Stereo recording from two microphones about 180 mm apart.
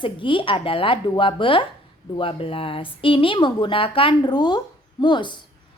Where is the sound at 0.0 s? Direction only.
30° left (ahead or behind).